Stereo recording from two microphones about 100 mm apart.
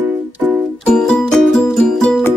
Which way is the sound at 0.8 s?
10° left (ahead or behind).